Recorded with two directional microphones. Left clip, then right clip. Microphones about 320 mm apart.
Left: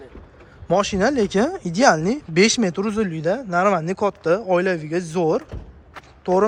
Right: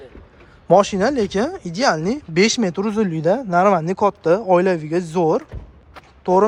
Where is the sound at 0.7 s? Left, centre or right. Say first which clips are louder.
Right 4 dB; centre.